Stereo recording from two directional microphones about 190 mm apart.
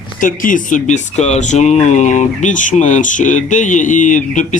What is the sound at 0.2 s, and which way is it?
Speech, 45° left (ahead or behind).